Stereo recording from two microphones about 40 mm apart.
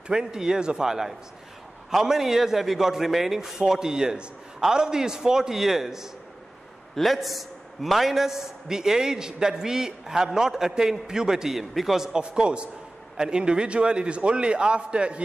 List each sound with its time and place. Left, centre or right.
0.1 s a man's voice: centre
12.1 s a man's voice: right